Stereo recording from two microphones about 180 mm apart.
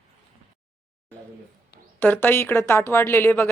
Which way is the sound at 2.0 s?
10° left (ahead or behind).